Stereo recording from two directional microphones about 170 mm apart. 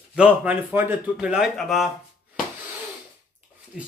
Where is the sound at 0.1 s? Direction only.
5° right (ahead or behind).